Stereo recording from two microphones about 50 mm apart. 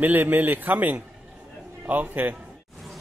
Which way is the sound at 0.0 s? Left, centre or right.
Right.